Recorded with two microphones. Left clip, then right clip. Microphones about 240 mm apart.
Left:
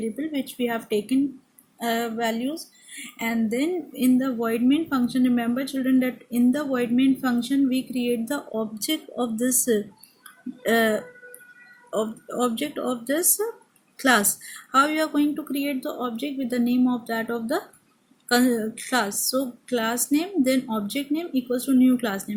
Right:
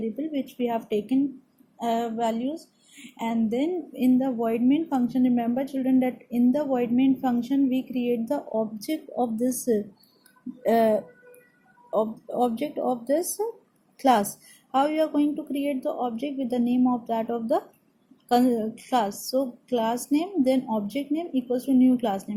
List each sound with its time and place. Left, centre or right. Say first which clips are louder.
0.0 s speech: left 1 dB; left